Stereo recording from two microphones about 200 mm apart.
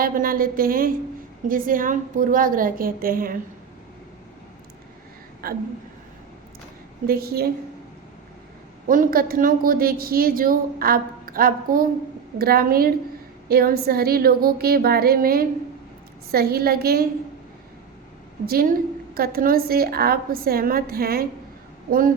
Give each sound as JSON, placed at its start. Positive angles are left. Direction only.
{"t": 0.0, "sound": "a woman's voice", "side_deg": -45}
{"t": 5.4, "sound": "a woman's voice", "side_deg": -50}
{"t": 7.1, "sound": "a woman's voice", "side_deg": -50}
{"t": 8.9, "sound": "a woman's voice", "side_deg": -45}
{"t": 18.4, "sound": "a woman's voice", "side_deg": -50}